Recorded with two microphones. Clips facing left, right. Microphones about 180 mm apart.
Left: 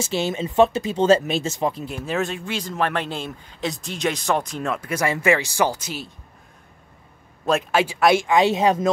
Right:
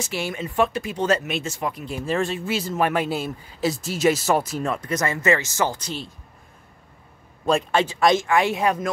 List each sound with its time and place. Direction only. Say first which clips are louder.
0.0 s speech: left 4 dB; 25° left (ahead or behind)
1.9 s speech: right 1 dB; centre (ahead or behind)
7.4 s speech: even; 5° left (ahead or behind); by 8.8 s 20° left (ahead or behind)